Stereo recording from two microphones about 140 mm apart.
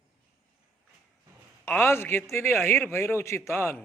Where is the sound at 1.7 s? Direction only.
15° left (ahead or behind).